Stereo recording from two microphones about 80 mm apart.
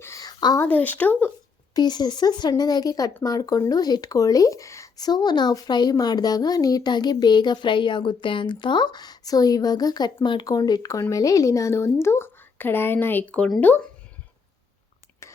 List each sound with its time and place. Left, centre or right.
0.2 s a sound: left
0.7 s speech: centre
1.7 s speech: left
4.9 s speech: left
10.4 s speech: left